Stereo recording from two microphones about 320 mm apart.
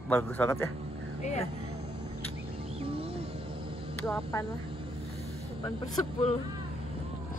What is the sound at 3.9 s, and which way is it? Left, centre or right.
Speech, centre.